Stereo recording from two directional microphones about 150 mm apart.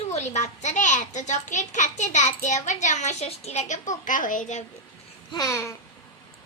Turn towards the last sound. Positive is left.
turn(degrees=20)  # may be behind; listen again after turning